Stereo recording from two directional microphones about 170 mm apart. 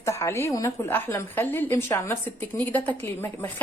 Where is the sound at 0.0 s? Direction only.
15° left (ahead or behind).